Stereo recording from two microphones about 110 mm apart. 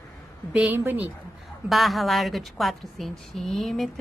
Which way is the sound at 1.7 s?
Centre (ahead or behind).